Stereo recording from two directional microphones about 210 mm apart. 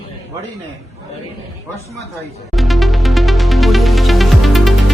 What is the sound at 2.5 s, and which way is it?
Music, centre (ahead or behind).